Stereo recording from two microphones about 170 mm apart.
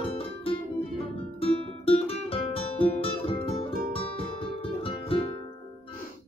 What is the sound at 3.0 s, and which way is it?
Music, 35° left (ahead or behind).